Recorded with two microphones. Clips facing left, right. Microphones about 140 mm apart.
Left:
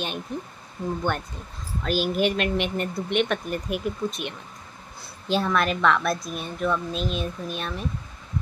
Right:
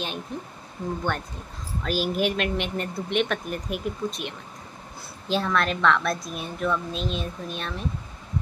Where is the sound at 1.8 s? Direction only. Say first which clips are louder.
Left 2 dB; centre (ahead or behind).